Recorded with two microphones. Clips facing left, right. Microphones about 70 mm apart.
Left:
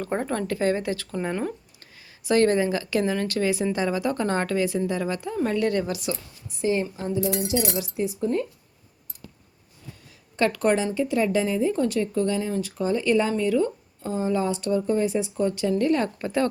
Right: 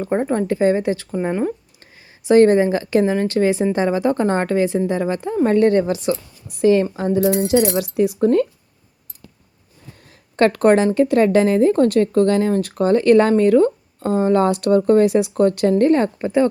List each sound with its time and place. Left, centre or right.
0.0 s speech: centre
6.5 s speech: right
10.3 s speech: right
15.7 s speech: right
16.1 s speech: right